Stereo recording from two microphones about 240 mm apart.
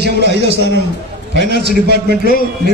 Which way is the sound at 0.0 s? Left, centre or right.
Right.